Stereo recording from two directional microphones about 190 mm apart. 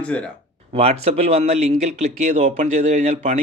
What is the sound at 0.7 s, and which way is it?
Speech, 30° right (ahead or behind).